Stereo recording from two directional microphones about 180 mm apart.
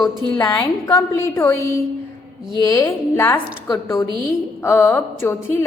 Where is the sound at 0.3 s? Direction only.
20° left (ahead or behind).